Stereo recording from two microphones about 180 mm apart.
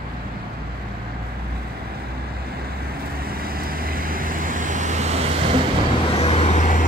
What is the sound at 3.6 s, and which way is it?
Vehicle, 55° right (ahead or behind).